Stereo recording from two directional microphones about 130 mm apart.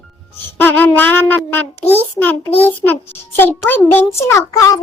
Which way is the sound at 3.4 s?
15° left (ahead or behind).